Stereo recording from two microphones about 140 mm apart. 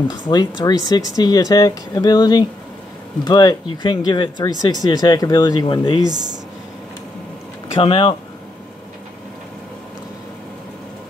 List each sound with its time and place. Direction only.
0.1 s speech: 30° left (ahead or behind)
7.7 s speech: 40° left (ahead or behind)